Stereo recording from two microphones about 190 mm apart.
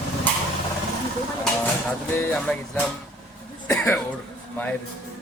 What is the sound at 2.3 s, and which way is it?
Speech, centre (ahead or behind).